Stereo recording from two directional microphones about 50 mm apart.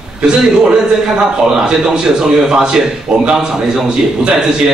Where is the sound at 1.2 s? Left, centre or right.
Centre.